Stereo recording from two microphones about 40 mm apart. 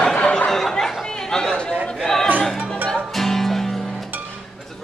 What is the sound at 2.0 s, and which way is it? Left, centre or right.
Music, centre.